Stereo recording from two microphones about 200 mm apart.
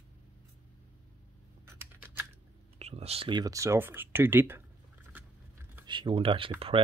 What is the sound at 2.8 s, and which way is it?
Speech, 30° right (ahead or behind).